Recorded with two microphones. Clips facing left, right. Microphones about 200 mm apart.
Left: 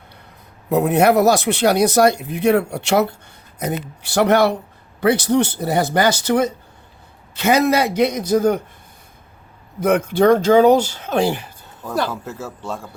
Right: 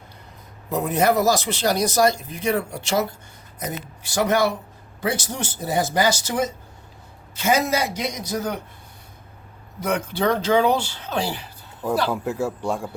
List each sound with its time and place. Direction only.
0.7 s speech: 65° left (ahead or behind)
9.8 s speech: 55° left (ahead or behind)
12.1 s speech: 15° right (ahead or behind)